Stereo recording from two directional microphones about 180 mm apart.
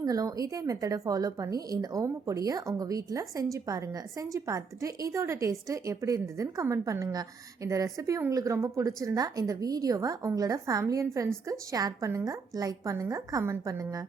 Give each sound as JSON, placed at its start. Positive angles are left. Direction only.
{"t": 0.0, "sound": "a woman's voice", "side_deg": -20}